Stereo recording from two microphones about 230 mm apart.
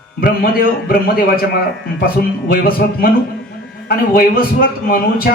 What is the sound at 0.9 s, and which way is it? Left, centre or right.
Speech, left.